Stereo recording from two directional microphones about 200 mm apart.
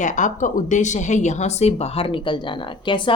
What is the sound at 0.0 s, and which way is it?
Speech, 40° left (ahead or behind).